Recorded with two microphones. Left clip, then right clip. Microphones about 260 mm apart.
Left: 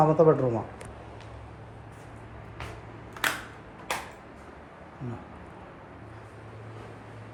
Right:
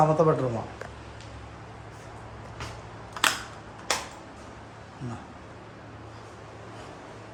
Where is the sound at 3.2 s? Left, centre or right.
Right.